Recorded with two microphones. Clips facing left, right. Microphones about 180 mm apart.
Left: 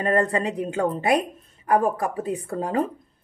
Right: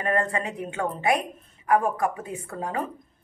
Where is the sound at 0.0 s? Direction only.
35° left (ahead or behind).